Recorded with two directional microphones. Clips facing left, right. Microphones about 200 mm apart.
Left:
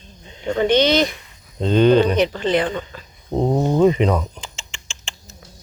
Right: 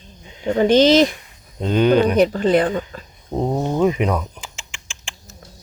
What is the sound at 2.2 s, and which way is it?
Speech, 40° right (ahead or behind).